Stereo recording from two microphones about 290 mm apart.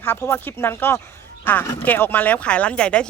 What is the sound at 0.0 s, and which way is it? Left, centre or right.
Speech, centre.